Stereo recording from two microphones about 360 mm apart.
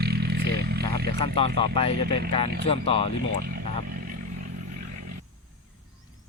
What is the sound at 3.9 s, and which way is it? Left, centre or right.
Vehicle, right.